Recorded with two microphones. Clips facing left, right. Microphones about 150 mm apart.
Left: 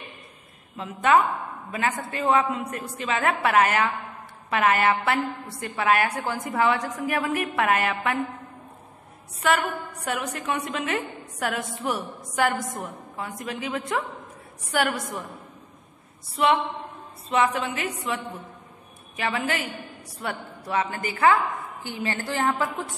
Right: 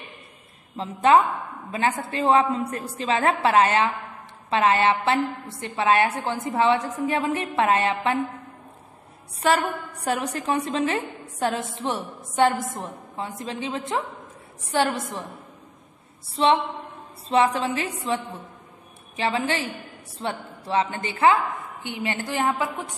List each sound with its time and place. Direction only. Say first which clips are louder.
0.7 s a woman's voice: right 3 dB; 30° right (ahead or behind)
9.4 s a woman's voice: right 2 dB; 30° right (ahead or behind)
16.3 s a woman's voice: right 2 dB; 30° right (ahead or behind)